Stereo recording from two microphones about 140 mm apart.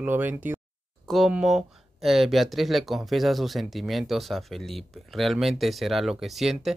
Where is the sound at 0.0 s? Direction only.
15° right (ahead or behind).